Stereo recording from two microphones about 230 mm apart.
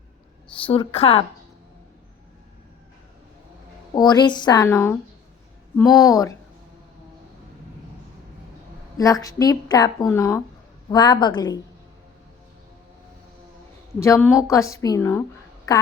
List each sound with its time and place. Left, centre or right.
0.5 s a woman's voice: left
3.9 s a woman's voice: centre
9.0 s a woman's voice: centre
14.0 s a woman's voice: centre